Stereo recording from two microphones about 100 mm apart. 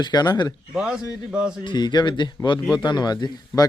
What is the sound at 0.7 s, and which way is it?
Speech, 5° right (ahead or behind).